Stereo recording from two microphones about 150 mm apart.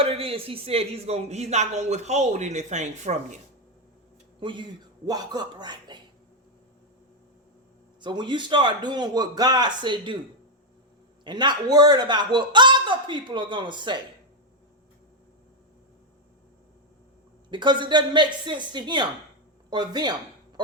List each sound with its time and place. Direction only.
0.0 s speech: 40° right (ahead or behind)
4.4 s speech: 30° right (ahead or behind)
8.0 s speech: 30° right (ahead or behind)
11.2 s a man's voice: 30° right (ahead or behind)
17.5 s a man's voice: 30° right (ahead or behind)